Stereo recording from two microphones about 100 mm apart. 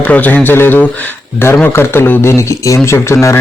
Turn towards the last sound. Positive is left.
turn(degrees=30)  # may be behind; listen again after turning